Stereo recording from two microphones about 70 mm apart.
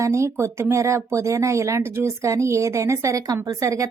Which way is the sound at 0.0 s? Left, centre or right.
Right.